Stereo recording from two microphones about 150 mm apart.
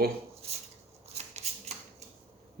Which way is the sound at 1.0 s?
45° right (ahead or behind).